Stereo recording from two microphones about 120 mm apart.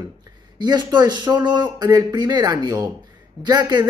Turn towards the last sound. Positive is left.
turn(degrees=-35)  # may be behind; listen again after turning